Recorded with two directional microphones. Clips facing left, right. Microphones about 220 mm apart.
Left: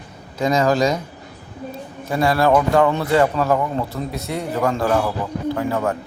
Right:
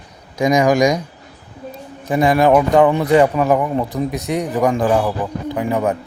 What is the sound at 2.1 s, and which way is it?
Speech, 15° right (ahead or behind).